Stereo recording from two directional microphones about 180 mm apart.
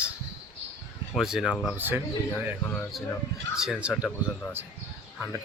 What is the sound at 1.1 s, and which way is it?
Speech, centre (ahead or behind).